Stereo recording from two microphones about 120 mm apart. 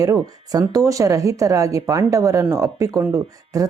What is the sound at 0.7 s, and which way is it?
A woman's voice, 30° right (ahead or behind).